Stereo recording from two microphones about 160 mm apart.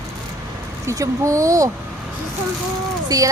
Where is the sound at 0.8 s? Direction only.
20° right (ahead or behind).